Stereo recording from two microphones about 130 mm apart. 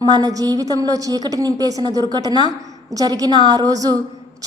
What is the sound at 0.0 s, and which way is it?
A woman's voice, 30° right (ahead or behind).